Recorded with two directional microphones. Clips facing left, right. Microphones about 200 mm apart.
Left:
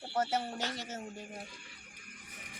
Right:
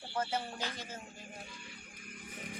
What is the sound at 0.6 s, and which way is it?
Speech, 70° left (ahead or behind).